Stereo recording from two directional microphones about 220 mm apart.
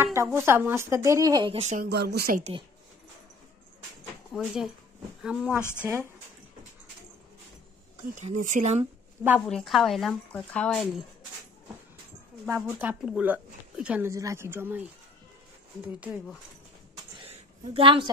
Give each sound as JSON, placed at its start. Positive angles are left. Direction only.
{"t": 0.0, "sound": "speech", "side_deg": -10}
{"t": 1.9, "sound": "speech", "side_deg": -50}
{"t": 4.3, "sound": "a woman's voice", "side_deg": 0}
{"t": 5.6, "sound": "speech", "side_deg": 10}
{"t": 8.1, "sound": "speech", "side_deg": -35}
{"t": 9.5, "sound": "a woman's voice", "side_deg": 0}
{"t": 12.5, "sound": "speech", "side_deg": -5}
{"t": 17.2, "sound": "a sound", "side_deg": -25}